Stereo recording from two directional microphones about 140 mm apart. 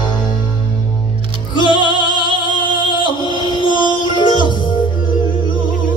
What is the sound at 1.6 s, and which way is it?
Music, 35° left (ahead or behind).